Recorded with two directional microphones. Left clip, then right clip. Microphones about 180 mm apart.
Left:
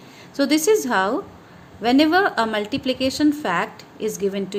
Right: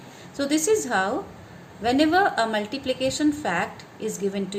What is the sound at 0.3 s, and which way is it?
A woman's voice, 50° left (ahead or behind).